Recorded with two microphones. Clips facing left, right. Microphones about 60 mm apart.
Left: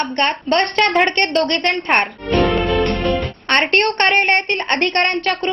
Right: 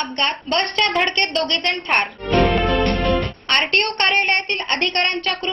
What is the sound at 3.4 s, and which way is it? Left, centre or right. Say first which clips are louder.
A woman's voice: left 6 dB; left.